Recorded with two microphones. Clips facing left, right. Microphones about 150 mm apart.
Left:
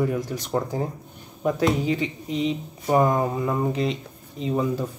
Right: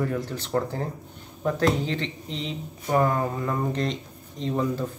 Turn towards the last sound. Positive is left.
turn(degrees=15)  # may be behind; listen again after turning